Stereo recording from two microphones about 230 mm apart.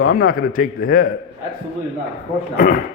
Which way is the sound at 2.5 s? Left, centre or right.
Left.